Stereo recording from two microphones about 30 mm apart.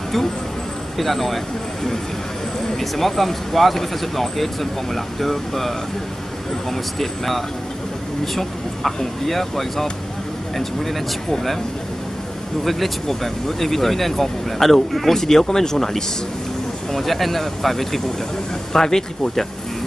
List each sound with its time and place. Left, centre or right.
0.9 s speech: centre
12.6 s speech: centre
16.9 s speech: centre
18.7 s speech: centre